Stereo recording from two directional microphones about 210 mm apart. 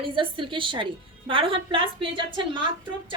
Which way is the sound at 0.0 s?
25° right (ahead or behind).